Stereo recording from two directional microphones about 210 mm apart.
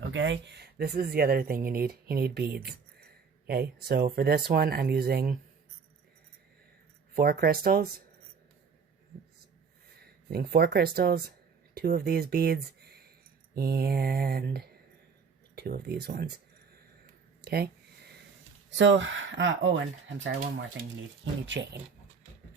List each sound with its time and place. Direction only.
0.1 s speech: 60° right (ahead or behind)
7.2 s speech: 45° right (ahead or behind)
10.3 s speech: 50° right (ahead or behind)
17.4 s a sound: 50° right (ahead or behind)
18.8 s speech: 65° right (ahead or behind)